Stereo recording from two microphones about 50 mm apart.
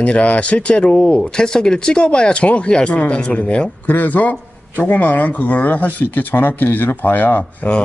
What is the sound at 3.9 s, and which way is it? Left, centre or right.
Speech, left.